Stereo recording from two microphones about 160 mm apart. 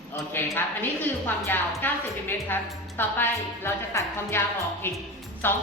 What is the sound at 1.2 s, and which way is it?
A woman's voice, 15° left (ahead or behind).